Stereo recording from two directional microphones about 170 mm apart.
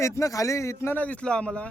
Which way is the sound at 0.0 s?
20° left (ahead or behind).